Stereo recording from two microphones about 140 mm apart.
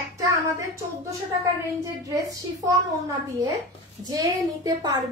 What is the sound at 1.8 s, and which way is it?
Speech, 25° right (ahead or behind).